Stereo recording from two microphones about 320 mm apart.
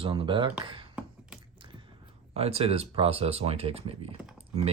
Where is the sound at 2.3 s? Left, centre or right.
Centre.